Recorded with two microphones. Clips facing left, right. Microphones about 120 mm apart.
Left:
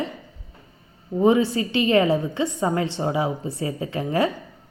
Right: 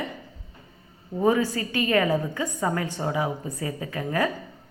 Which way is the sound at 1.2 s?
25° left (ahead or behind).